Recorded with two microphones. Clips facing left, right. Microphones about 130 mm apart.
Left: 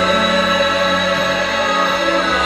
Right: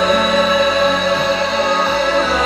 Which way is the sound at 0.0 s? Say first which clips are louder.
Right 2 dB; centre (ahead or behind).